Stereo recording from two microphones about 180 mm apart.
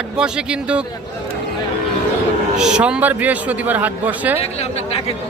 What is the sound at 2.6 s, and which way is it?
A man's voice, 5° right (ahead or behind).